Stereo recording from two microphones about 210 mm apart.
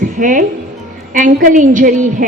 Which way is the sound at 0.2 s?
40° right (ahead or behind).